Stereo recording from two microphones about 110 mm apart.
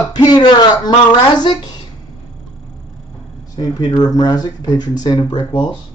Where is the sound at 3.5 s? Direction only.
35° left (ahead or behind).